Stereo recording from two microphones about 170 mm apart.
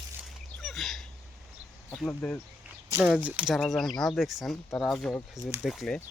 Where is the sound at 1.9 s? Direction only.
5° left (ahead or behind).